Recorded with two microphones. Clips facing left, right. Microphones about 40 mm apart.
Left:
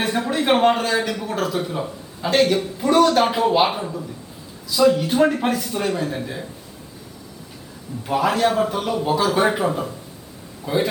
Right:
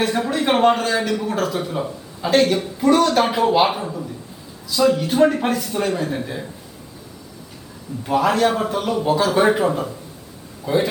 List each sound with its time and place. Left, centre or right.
0.0 s speech: centre
8.0 s speech: centre
10.6 s speech: left